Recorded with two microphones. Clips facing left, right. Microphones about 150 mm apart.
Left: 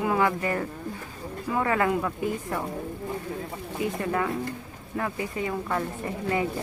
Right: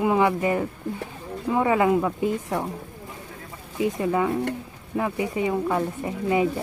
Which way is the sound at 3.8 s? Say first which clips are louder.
Right 5 dB; 15° right (ahead or behind).